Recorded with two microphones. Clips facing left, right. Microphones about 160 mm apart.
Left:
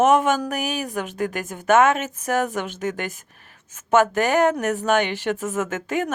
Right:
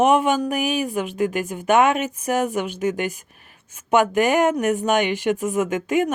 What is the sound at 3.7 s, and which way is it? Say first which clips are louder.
Speech: even; 15° right (ahead or behind).